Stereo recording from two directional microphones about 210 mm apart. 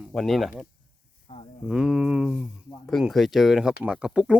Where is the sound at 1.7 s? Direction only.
5° right (ahead or behind).